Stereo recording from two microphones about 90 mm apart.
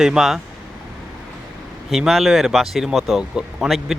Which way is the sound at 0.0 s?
5° right (ahead or behind).